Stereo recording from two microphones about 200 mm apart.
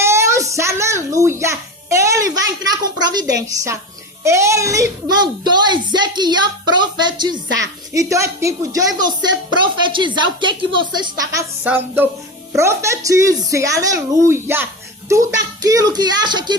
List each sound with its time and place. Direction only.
0.0 s music: 15° right (ahead or behind)
3.4 s a child's voice: 15° right (ahead or behind)